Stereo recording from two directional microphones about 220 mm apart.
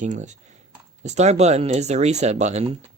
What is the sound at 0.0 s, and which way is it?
Speech, 35° right (ahead or behind).